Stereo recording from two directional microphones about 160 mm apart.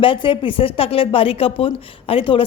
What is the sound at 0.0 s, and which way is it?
A woman's voice, 35° left (ahead or behind).